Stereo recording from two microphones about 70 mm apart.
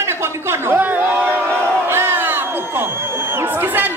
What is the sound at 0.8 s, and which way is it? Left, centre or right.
Crowd, right.